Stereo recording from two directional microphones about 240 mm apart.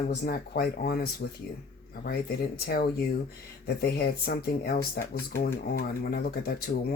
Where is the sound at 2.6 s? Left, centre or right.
Left.